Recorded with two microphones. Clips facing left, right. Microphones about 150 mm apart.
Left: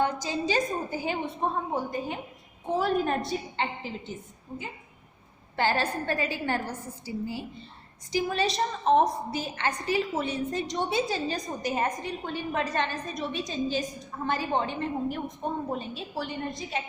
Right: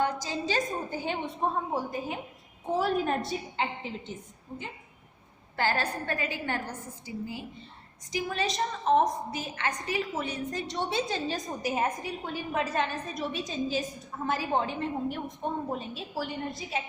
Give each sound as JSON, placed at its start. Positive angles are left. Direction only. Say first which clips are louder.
{"t": 0.0, "sound": "a woman's voice", "louder": "left 2 dB", "side_deg": 15}
{"t": 5.5, "sound": "a woman's voice", "louder": "left 2 dB", "side_deg": 20}
{"t": 11.3, "sound": "a woman's voice", "louder": "left 1 dB", "side_deg": -5}